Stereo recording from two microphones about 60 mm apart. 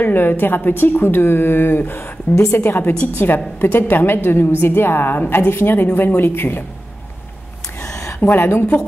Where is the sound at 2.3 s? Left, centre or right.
Left.